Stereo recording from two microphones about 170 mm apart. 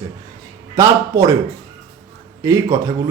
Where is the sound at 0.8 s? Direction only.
20° right (ahead or behind).